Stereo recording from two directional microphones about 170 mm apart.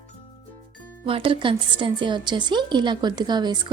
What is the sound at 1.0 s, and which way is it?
A woman's voice, 30° right (ahead or behind).